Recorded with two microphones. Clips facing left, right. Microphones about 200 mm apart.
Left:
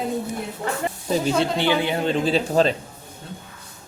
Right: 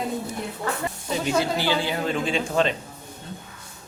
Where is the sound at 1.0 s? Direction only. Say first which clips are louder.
Left 5 dB; 35° left (ahead or behind).